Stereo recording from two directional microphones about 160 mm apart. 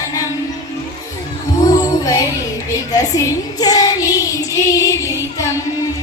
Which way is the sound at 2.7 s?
20° left (ahead or behind).